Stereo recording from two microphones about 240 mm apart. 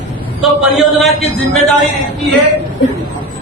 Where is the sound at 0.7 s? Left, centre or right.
Centre.